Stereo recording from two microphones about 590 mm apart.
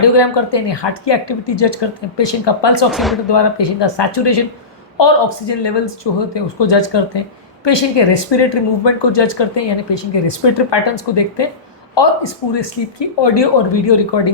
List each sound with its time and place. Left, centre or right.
0.0 s speech: left
2.9 s speech: centre
3.2 s speech: left